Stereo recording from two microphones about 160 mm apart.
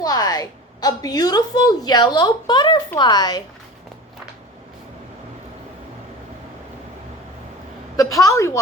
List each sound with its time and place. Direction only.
0.0 s a woman's voice: 25° left (ahead or behind)
7.9 s a woman's voice: 20° left (ahead or behind)